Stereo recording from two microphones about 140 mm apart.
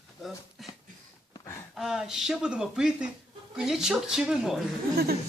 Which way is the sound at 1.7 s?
5° right (ahead or behind).